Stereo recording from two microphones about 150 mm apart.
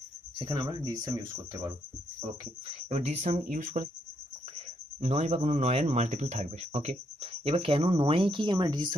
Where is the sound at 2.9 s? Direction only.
50° right (ahead or behind).